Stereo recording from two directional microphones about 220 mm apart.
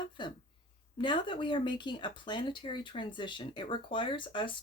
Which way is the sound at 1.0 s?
20° left (ahead or behind).